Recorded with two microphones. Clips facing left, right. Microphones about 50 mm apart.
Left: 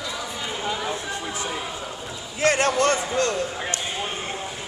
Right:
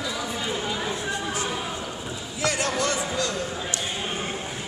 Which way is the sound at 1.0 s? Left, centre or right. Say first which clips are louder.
Right 2 dB; right.